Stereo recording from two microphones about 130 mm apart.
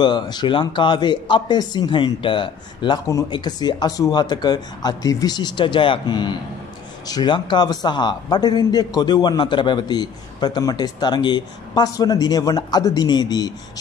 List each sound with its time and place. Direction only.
0.0 s a man's voice: 35° left (ahead or behind)